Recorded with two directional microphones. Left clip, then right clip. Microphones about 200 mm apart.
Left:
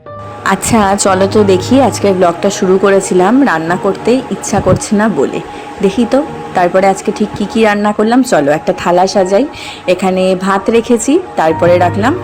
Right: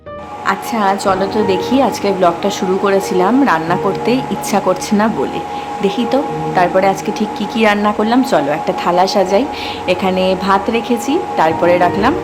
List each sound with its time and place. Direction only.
0.4 s speech: 40° left (ahead or behind); by 12.1 s 15° left (ahead or behind)